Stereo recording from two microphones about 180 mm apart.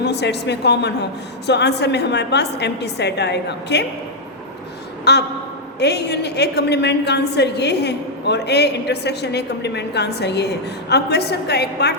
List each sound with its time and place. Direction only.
0.0 s a woman's voice: 70° left (ahead or behind)
5.1 s a woman's voice: 70° left (ahead or behind)